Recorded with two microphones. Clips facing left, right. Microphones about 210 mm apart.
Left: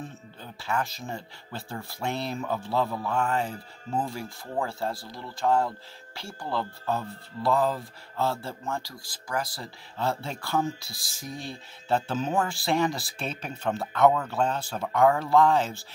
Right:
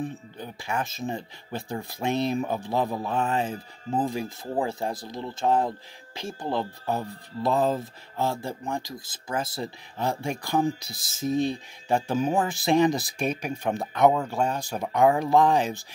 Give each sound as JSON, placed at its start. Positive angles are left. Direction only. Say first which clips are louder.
{"t": 0.0, "sound": "speech", "louder": "right 7 dB", "side_deg": -15}